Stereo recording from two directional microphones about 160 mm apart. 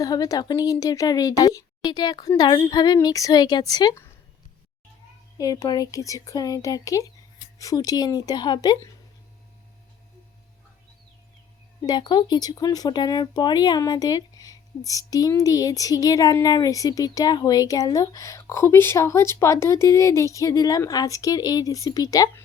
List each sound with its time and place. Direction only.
0.0 s speech: 25° left (ahead or behind)
5.4 s speech: 20° left (ahead or behind)
11.8 s speech: 25° left (ahead or behind)